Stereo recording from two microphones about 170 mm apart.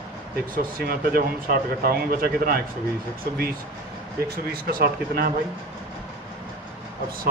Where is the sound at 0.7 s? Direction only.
60° right (ahead or behind).